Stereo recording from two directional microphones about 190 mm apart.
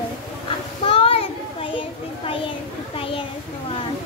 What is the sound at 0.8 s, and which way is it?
Children playing, 30° left (ahead or behind).